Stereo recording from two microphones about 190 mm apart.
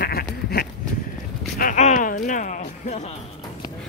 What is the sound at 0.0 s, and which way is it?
Goat, 55° left (ahead or behind).